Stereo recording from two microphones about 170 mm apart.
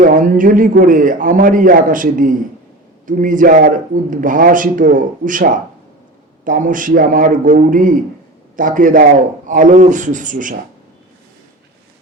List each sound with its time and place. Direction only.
0.0 s a man's voice: 50° right (ahead or behind)